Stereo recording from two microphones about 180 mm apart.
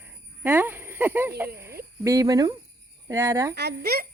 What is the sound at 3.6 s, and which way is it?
Speech, 65° right (ahead or behind).